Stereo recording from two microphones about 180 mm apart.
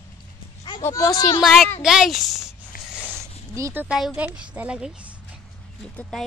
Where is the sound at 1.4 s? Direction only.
Centre (ahead or behind).